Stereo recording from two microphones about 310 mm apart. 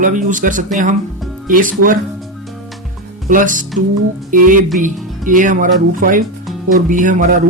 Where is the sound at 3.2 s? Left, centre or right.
Right.